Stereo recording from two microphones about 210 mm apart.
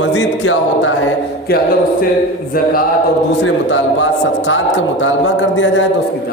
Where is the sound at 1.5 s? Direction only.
50° left (ahead or behind).